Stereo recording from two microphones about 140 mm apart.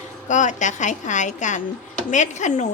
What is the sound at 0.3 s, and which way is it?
Speech, 60° left (ahead or behind).